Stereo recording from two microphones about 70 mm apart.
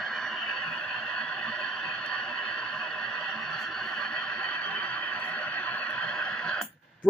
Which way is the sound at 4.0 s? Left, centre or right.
Centre.